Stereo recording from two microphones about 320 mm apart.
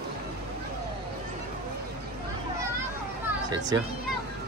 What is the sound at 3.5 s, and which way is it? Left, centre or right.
Speech, centre.